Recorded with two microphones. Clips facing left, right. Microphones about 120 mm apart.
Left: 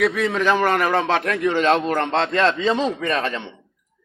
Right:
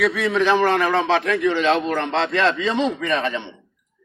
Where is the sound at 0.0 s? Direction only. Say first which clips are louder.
Even; 45° left (ahead or behind).